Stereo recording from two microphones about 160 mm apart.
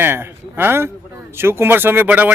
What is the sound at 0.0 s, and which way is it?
Speech, 15° right (ahead or behind).